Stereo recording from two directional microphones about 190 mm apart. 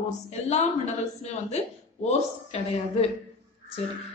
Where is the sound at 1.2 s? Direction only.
35° left (ahead or behind).